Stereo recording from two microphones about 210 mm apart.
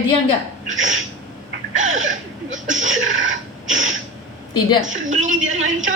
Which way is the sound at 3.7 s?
35° right (ahead or behind).